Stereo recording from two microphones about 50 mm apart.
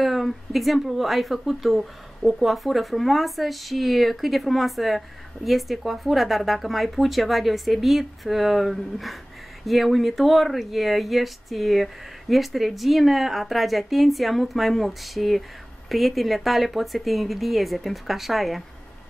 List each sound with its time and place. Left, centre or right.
0.0 s speech: centre